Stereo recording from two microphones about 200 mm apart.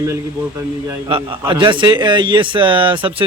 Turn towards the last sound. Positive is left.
turn(degrees=-25)  # may be behind; listen again after turning